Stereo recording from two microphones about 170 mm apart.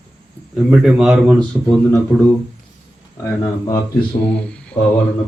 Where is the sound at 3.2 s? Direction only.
20° left (ahead or behind).